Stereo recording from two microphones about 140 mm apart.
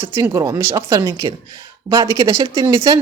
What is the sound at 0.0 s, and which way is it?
Speech, 20° right (ahead or behind).